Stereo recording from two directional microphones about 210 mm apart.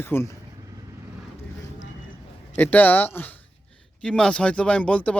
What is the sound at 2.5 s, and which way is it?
Speech, 10° left (ahead or behind).